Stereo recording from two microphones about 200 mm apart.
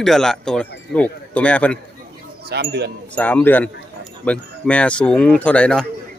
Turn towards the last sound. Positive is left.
turn(degrees=5)  # may be behind; listen again after turning